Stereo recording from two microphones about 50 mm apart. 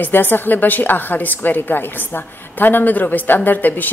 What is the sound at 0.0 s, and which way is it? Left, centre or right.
A woman's voice, left.